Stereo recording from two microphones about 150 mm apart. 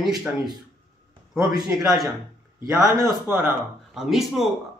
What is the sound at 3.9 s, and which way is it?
Speech, centre (ahead or behind).